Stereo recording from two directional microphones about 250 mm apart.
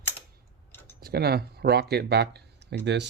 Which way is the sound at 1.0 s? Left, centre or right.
Right.